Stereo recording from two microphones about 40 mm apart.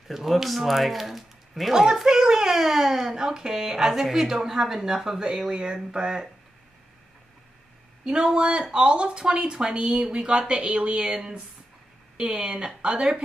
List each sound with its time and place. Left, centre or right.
0.1 s speech: centre
8.0 s speech: centre
12.2 s speech: right